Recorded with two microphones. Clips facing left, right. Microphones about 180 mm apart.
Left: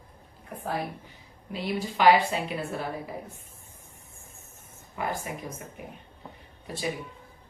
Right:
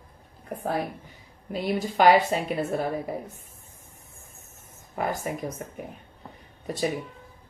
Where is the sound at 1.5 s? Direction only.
45° right (ahead or behind).